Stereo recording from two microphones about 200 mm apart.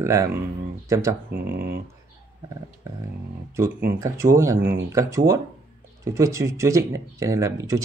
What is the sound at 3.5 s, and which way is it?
Speech, 15° right (ahead or behind).